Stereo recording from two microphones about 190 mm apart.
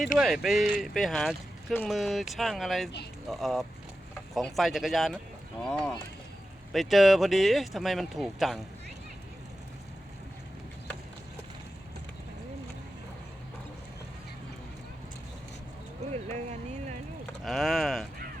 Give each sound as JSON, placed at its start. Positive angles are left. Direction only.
{"t": 0.2, "sound": "speech", "side_deg": 0}
{"t": 16.1, "sound": "a sound", "side_deg": -35}
{"t": 17.4, "sound": "speech", "side_deg": 0}